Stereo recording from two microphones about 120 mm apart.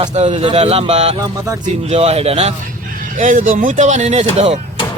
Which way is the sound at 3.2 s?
90° right.